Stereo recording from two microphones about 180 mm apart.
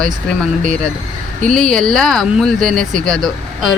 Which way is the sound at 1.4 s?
5° left (ahead or behind).